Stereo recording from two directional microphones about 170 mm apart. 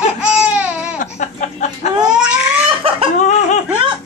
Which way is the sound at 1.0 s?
45° left (ahead or behind).